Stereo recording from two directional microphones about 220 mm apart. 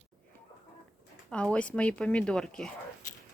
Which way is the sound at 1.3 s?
5° left (ahead or behind).